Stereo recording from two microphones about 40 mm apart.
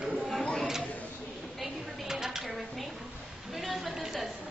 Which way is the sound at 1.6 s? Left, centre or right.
Centre.